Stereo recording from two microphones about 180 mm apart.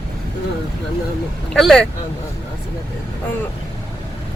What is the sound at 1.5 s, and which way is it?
Speech, 5° left (ahead or behind).